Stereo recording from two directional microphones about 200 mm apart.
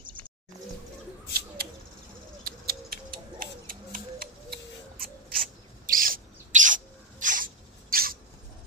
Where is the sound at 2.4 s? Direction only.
50° right (ahead or behind).